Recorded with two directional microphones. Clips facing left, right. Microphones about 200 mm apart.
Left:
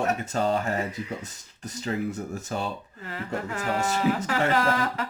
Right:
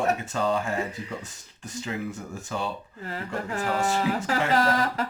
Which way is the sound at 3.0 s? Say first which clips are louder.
Even; 35° right (ahead or behind).